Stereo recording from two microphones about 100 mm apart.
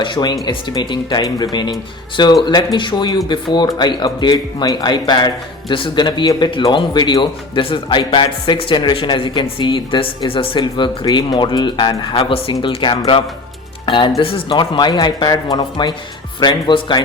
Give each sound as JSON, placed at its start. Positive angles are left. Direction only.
{"t": 0.0, "sound": "speech", "side_deg": 50}
{"t": 10.6, "sound": "speech", "side_deg": 45}
{"t": 14.2, "sound": "speech", "side_deg": 65}
{"t": 14.6, "sound": "speech", "side_deg": 50}